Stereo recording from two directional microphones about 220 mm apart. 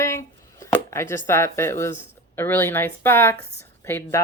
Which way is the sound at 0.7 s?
10° left (ahead or behind).